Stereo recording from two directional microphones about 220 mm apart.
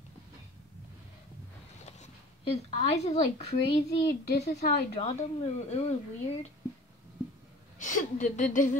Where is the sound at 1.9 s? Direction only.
30° left (ahead or behind).